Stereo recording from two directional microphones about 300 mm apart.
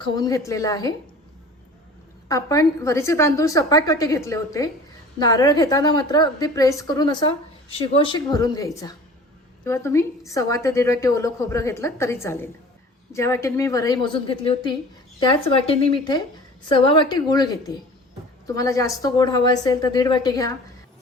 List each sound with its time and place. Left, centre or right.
0.0 s a woman's voice: centre
2.3 s a woman's voice: centre